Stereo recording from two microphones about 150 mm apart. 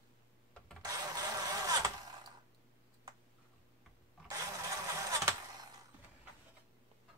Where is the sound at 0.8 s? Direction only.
25° right (ahead or behind).